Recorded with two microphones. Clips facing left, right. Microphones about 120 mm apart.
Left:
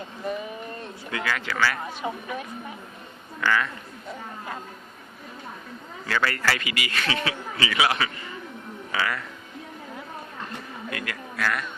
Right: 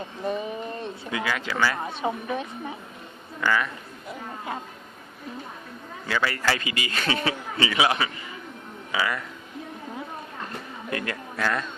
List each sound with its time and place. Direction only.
0.8 s speech: 20° right (ahead or behind)
6.1 s a man's voice: 15° right (ahead or behind)
8.9 s music: 15° right (ahead or behind)
10.8 s speech: 30° right (ahead or behind)